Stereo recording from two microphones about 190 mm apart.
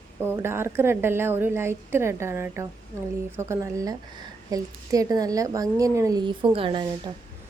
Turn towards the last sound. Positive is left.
turn(degrees=-25)  # may be behind; listen again after turning